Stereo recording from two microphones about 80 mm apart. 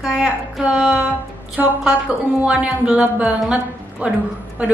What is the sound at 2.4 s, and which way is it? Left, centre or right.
A woman's voice, centre.